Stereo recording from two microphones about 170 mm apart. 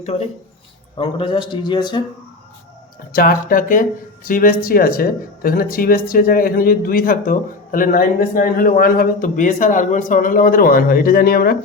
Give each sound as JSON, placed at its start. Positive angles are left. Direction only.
{"t": 0.9, "sound": "a man's voice", "side_deg": 30}
{"t": 3.1, "sound": "speech", "side_deg": 55}